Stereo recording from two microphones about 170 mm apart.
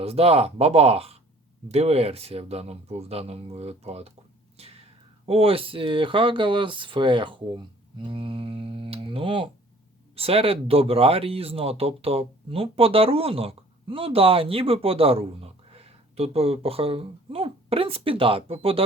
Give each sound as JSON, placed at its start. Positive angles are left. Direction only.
{"t": 0.0, "sound": "speech", "side_deg": -35}
{"t": 5.2, "sound": "speech", "side_deg": -35}